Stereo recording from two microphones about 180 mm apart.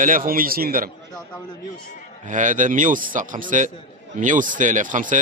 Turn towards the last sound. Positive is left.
turn(degrees=-45)  # may be behind; listen again after turning